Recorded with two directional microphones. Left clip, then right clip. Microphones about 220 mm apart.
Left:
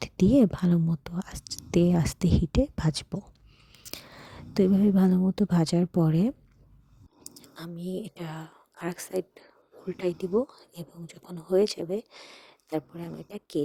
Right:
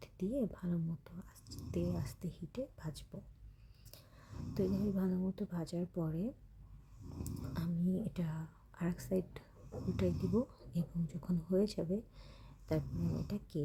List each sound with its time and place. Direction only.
0.0 s a woman's voice: 40° left (ahead or behind)